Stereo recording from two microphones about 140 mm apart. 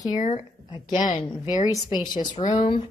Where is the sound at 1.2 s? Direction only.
30° left (ahead or behind).